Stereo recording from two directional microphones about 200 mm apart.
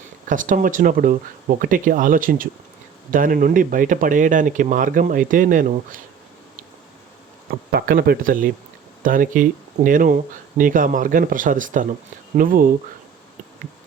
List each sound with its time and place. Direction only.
0.3 s speech: 40° right (ahead or behind)
7.7 s speech: 50° right (ahead or behind)